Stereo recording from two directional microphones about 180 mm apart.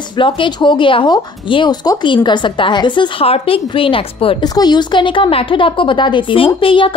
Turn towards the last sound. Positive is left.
turn(degrees=30)  # may be behind; listen again after turning